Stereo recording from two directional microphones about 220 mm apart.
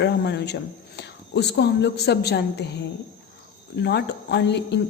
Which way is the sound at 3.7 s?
50° left (ahead or behind).